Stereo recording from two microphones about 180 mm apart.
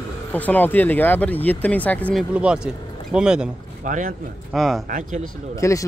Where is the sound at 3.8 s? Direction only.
45° right (ahead or behind).